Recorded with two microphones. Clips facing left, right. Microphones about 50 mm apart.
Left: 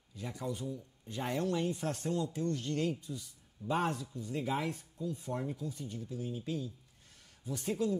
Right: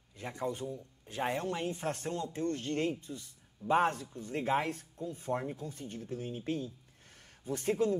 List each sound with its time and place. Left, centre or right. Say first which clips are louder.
0.1 s a man's voice: right 3 dB; right